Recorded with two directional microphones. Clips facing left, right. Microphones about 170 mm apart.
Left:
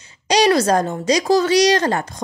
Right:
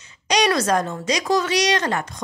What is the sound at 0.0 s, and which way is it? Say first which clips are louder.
Speech: left 4 dB; 30° left (ahead or behind).